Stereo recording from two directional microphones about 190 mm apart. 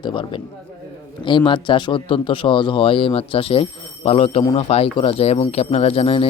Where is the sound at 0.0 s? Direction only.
25° left (ahead or behind).